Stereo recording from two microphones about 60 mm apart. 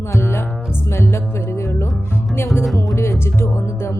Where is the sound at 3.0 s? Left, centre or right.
Left.